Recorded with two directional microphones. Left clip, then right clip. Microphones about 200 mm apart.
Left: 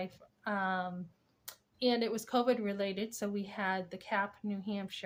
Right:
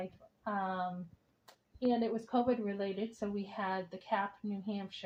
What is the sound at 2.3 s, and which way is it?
A woman's voice, 20° left (ahead or behind).